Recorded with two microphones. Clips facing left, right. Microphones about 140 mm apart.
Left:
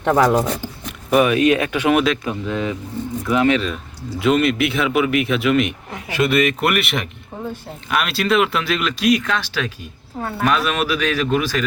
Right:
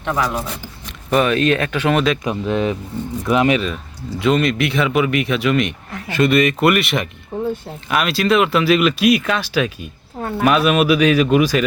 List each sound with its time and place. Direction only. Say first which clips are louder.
0.0 s speech: left 6 dB; 45° left (ahead or behind)
1.1 s speech: left 1 dB; 10° left (ahead or behind)
2.2 s speech: right 4 dB; 25° right (ahead or behind)
4.2 s speech: even; 5° left (ahead or behind)
6.2 s speech: right 3 dB; centre (ahead or behind); by 11.6 s 15° right (ahead or behind)